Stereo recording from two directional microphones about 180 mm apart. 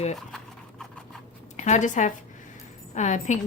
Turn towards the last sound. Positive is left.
turn(degrees=40)  # may be behind; listen again after turning